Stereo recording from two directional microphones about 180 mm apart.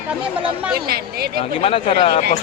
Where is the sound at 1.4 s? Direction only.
30° left (ahead or behind).